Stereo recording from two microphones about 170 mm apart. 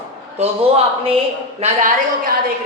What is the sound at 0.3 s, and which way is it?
Speech, 35° right (ahead or behind).